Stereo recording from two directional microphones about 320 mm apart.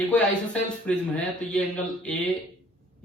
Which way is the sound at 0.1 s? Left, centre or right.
Centre.